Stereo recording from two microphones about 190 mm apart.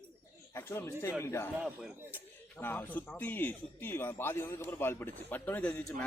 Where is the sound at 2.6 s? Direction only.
10° left (ahead or behind).